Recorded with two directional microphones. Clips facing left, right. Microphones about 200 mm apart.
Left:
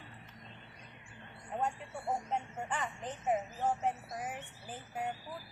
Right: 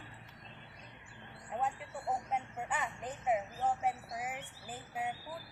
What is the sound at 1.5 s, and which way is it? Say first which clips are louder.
Bird: left 1 dB; 5° right (ahead or behind).